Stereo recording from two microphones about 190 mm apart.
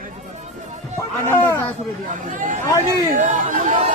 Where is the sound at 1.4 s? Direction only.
10° left (ahead or behind).